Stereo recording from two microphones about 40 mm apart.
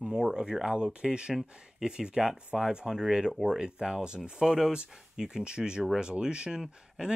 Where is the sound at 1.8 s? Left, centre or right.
Right.